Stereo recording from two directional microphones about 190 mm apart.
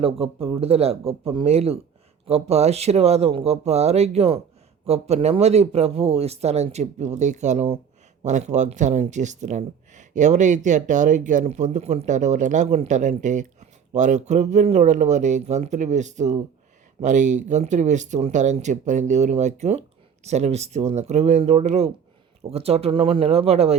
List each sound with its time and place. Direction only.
0.0 s speech: 30° right (ahead or behind)